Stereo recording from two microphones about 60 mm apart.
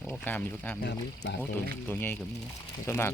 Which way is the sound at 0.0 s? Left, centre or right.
Left.